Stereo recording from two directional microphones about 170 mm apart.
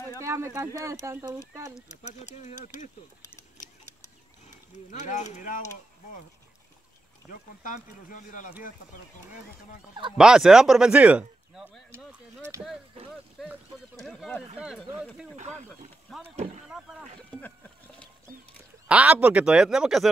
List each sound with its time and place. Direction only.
0.2 s speech: 15° right (ahead or behind)
1.9 s speech: 45° left (ahead or behind)
4.9 s speech: 45° left (ahead or behind)
7.2 s speech: 50° left (ahead or behind)
10.1 s speech: 5° right (ahead or behind)
15.3 s speech: 45° right (ahead or behind)
16.1 s speech: centre (ahead or behind)
18.9 s speech: 5° right (ahead or behind)